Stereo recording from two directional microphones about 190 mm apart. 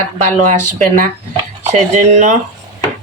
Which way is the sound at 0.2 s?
40° right (ahead or behind).